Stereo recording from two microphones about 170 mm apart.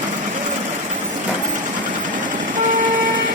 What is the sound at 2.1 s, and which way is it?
Vehicle, 50° right (ahead or behind).